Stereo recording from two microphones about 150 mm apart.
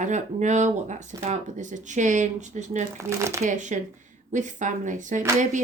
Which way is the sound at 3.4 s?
55° right (ahead or behind).